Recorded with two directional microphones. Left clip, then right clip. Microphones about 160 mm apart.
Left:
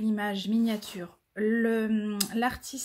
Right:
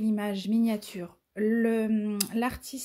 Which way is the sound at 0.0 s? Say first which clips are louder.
Even; 30° right (ahead or behind).